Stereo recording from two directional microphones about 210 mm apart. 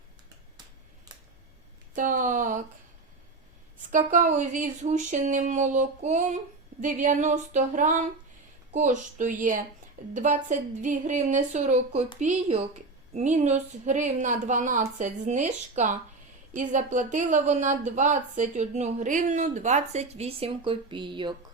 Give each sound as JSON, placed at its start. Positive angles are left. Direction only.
{"t": 2.0, "sound": "a woman's voice", "side_deg": -40}
{"t": 3.9, "sound": "a woman's voice", "side_deg": -40}